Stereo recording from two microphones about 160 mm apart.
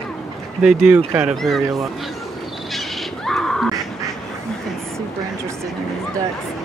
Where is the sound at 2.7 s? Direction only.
Centre (ahead or behind).